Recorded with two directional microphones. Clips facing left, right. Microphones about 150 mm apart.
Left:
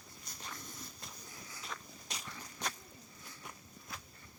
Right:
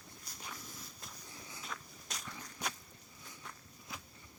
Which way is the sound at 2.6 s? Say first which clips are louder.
Even; 10° right (ahead or behind).